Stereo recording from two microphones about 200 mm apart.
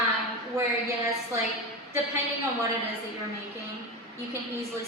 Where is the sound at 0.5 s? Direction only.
15° right (ahead or behind).